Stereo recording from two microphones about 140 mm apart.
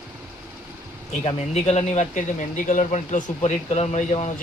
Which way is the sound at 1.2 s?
50° left (ahead or behind).